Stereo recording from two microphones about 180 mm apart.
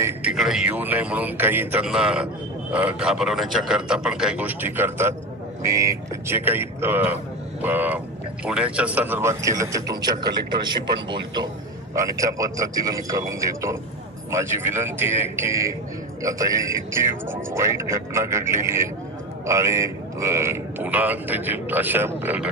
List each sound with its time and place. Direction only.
0.0 s a man's voice: 5° right (ahead or behind)